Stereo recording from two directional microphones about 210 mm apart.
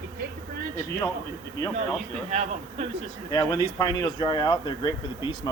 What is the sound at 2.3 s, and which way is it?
Speech, 30° right (ahead or behind).